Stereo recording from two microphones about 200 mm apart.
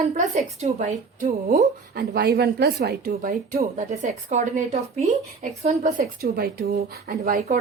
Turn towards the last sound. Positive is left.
turn(degrees=-50)  # may be behind; listen again after turning